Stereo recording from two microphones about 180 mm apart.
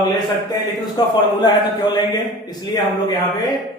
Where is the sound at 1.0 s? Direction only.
20° left (ahead or behind).